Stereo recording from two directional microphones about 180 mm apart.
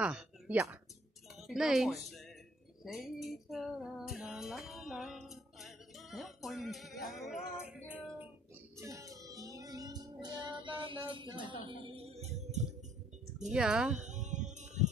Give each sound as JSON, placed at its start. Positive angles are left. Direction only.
{"t": 0.0, "sound": "a sound", "side_deg": -5}
{"t": 1.5, "sound": "speech", "side_deg": 0}
{"t": 2.8, "sound": "music", "side_deg": 0}
{"t": 8.7, "sound": "music", "side_deg": -15}
{"t": 13.5, "sound": "speech", "side_deg": -5}
{"t": 13.9, "sound": "a sound", "side_deg": -40}